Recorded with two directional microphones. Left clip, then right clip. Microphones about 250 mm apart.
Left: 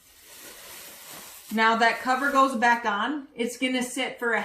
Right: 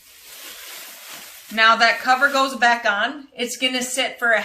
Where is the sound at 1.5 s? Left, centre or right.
Centre.